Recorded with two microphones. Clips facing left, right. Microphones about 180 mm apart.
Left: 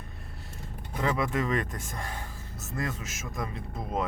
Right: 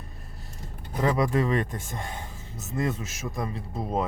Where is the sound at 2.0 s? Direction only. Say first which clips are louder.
Right 1 dB; 25° right (ahead or behind).